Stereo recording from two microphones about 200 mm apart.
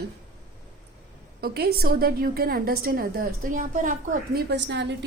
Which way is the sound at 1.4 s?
50° right (ahead or behind).